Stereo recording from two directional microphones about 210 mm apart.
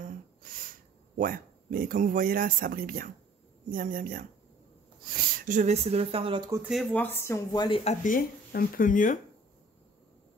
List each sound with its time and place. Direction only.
0.4 s speech: 40° right (ahead or behind); by 6.6 s 20° right (ahead or behind)
6.7 s speech: centre (ahead or behind); by 7.9 s 25° left (ahead or behind)
8.0 s speech: 40° left (ahead or behind)